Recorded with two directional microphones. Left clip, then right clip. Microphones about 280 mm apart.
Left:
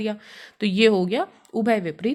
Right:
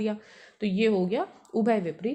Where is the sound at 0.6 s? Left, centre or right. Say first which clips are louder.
Left 7 dB; left.